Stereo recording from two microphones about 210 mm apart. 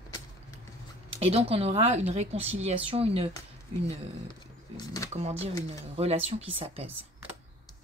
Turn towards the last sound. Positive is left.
turn(degrees=-25)  # may be behind; listen again after turning